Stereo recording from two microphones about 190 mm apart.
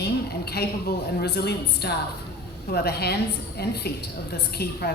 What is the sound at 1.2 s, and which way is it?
A woman's voice, 60° left (ahead or behind).